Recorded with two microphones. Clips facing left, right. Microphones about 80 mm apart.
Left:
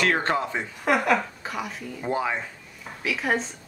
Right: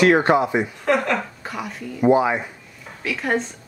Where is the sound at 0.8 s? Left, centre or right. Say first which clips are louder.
Left 2 dB; centre.